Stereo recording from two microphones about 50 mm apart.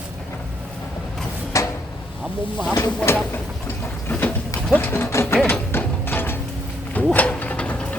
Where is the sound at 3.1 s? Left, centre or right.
Left.